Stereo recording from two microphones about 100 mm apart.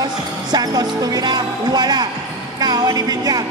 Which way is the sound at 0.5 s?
40° right (ahead or behind).